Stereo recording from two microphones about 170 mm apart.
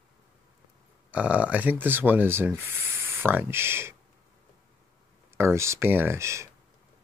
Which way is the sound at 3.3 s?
15° right (ahead or behind).